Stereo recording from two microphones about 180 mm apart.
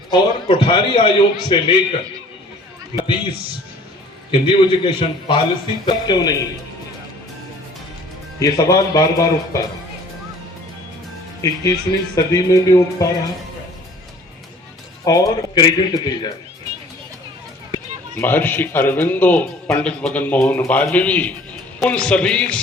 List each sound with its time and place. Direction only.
0.1 s a man's voice: 30° left (ahead or behind)
4.3 s a man's voice: 30° left (ahead or behind)
8.4 s a man's voice: 20° left (ahead or behind)
11.4 s a man's voice: 20° left (ahead or behind)
15.0 s a man's voice: 20° left (ahead or behind)
18.1 s a man's voice: 10° left (ahead or behind)